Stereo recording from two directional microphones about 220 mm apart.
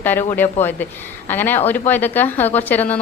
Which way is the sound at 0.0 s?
10° left (ahead or behind).